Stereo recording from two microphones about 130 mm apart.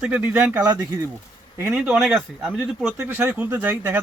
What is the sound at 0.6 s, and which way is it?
Speech, 25° right (ahead or behind).